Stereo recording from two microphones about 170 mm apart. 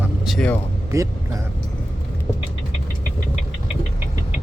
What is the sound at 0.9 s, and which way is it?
Speech, 20° right (ahead or behind).